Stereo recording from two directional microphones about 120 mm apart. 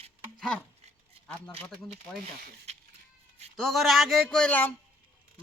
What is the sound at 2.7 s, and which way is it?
Goat, 65° right (ahead or behind).